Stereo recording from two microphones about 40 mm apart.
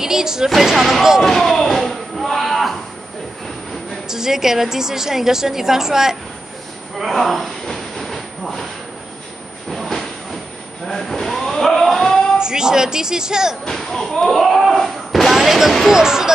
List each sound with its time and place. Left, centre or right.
0.0 s a woman's voice: centre
0.5 s speech: centre
1.2 s music: centre
4.1 s a woman's voice: centre
7.0 s train: centre
9.7 s a sound: centre
12.4 s a woman's voice: centre
13.7 s a woman's voice: centre